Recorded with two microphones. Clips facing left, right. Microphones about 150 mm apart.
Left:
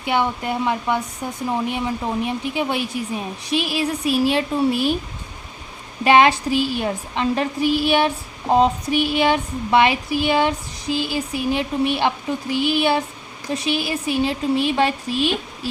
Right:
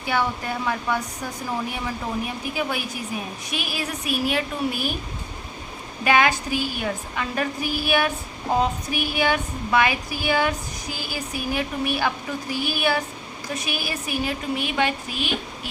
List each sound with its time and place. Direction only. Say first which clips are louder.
0.0 s a woman's voice: left 3 dB; 20° left (ahead or behind)
6.1 s a woman's voice: left 5 dB; 25° left (ahead or behind)